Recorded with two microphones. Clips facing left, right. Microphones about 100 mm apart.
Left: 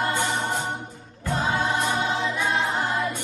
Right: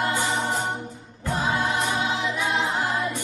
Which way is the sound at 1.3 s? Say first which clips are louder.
Even; 15° right (ahead or behind).